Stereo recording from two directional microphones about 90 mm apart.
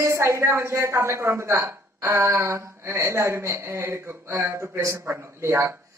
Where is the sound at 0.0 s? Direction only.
35° right (ahead or behind).